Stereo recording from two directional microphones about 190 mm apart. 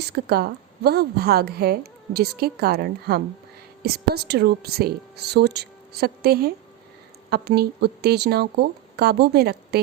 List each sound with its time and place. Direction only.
0.0 s a woman's voice: 55° right (ahead or behind)